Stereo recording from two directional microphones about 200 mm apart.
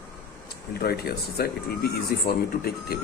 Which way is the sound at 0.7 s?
50° left (ahead or behind).